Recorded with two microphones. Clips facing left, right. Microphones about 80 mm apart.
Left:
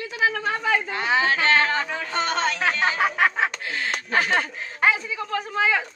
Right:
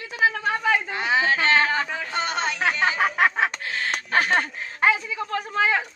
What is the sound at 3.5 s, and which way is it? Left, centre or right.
Bird, right.